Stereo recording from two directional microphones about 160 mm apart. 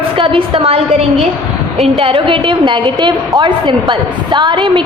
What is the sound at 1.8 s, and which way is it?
A woman's voice, 35° right (ahead or behind).